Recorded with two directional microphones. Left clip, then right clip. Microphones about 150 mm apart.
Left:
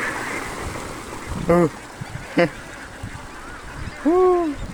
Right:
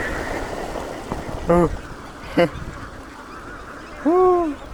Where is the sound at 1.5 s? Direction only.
60° left (ahead or behind).